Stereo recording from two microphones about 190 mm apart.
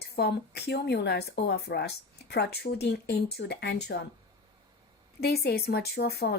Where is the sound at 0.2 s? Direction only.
60° left (ahead or behind).